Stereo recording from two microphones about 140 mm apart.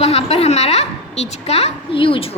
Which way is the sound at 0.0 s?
45° left (ahead or behind).